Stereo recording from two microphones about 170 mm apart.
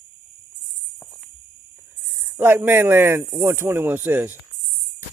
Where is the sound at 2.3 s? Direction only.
15° right (ahead or behind).